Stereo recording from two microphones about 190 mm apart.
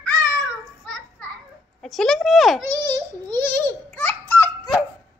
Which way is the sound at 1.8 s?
Centre (ahead or behind).